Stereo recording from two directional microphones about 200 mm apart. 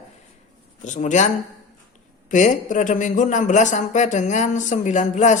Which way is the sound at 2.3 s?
40° left (ahead or behind).